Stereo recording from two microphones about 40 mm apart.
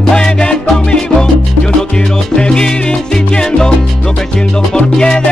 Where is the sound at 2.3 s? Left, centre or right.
Centre.